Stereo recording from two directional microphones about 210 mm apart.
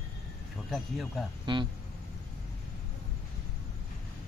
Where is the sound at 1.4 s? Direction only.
20° right (ahead or behind).